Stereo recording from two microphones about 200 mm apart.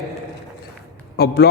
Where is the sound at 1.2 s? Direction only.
55° left (ahead or behind).